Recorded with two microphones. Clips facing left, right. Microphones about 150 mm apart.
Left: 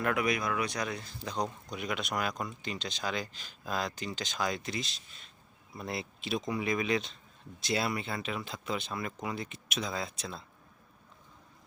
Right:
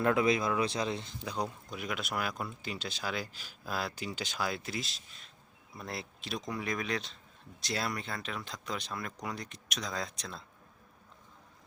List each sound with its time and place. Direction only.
0.0 s speech: 25° right (ahead or behind)
1.2 s speech: 10° right (ahead or behind)